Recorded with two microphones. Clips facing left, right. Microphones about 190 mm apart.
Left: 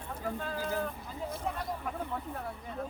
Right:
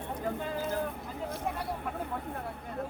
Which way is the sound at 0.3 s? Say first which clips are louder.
Right 2 dB; 20° right (ahead or behind).